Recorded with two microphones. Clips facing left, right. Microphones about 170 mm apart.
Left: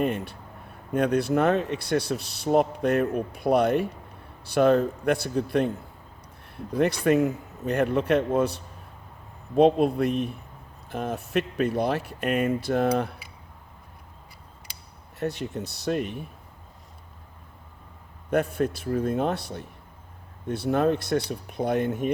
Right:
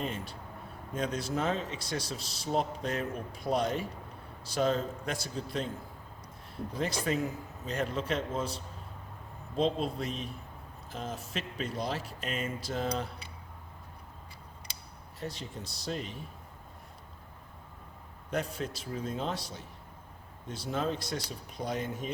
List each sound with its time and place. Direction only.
0.0 s speech: 60° left (ahead or behind)
6.7 s speech: 60° left (ahead or behind)
15.2 s speech: 65° left (ahead or behind)
18.3 s speech: 60° left (ahead or behind)